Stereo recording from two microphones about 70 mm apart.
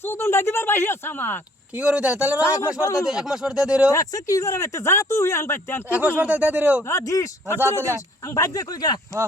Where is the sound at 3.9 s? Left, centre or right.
Left.